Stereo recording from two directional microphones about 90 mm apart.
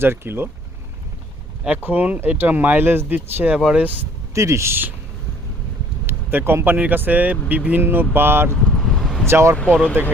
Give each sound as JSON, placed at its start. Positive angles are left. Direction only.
{"t": 0.0, "sound": "speech", "side_deg": -25}
{"t": 1.6, "sound": "speech", "side_deg": -20}
{"t": 4.4, "sound": "speech", "side_deg": -35}
{"t": 6.1, "sound": "speech", "side_deg": -25}
{"t": 8.8, "sound": "a sound", "side_deg": 0}
{"t": 9.2, "sound": "speech", "side_deg": -30}